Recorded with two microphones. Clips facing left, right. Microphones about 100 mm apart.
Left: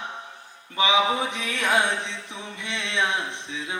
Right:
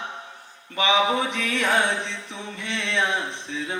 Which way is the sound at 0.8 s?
15° left (ahead or behind).